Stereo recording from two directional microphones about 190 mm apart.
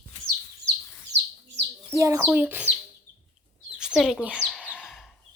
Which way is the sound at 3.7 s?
5° right (ahead or behind).